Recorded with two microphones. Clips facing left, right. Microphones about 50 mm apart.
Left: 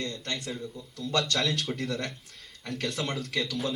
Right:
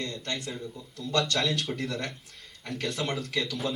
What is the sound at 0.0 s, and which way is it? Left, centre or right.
Speech, right.